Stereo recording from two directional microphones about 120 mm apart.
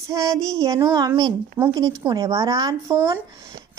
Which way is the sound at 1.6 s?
25° right (ahead or behind).